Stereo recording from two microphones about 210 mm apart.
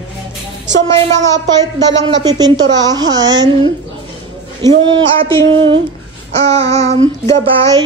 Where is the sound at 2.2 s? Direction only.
20° right (ahead or behind).